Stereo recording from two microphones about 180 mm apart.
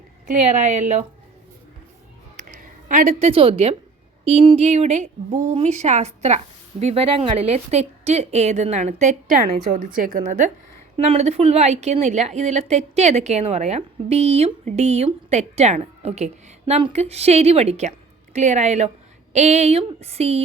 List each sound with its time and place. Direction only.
0.3 s a woman's voice: 40° right (ahead or behind)
2.3 s a sound: 45° right (ahead or behind)
4.2 s a woman's voice: 35° right (ahead or behind)
10.9 s a woman's voice: 35° right (ahead or behind)